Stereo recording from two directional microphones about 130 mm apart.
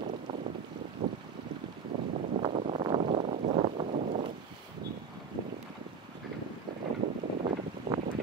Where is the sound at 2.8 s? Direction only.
45° right (ahead or behind).